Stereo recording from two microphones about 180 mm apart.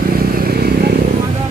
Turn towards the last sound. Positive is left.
turn(degrees=-60)  # may be behind; listen again after turning